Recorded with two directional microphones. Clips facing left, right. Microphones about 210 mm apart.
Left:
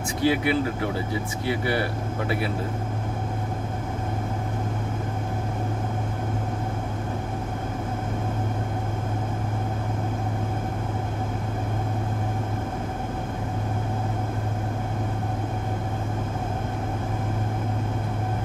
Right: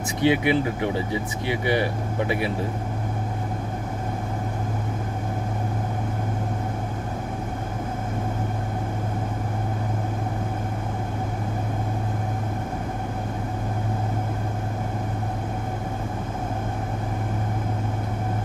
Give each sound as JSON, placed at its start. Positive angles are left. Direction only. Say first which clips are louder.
{"t": 0.2, "sound": "speech", "louder": "right 2 dB", "side_deg": -20}